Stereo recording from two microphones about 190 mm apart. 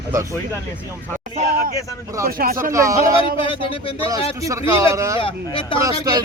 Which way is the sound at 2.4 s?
50° right (ahead or behind).